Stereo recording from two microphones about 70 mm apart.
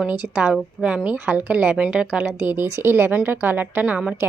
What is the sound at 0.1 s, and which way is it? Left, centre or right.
A woman's voice, centre.